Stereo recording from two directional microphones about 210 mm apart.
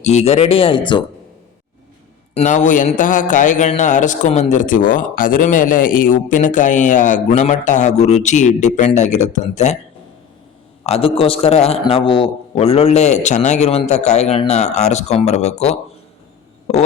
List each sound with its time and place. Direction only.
0.0 s speech: 30° left (ahead or behind)
2.3 s speech: 35° left (ahead or behind)
10.8 s speech: 25° left (ahead or behind)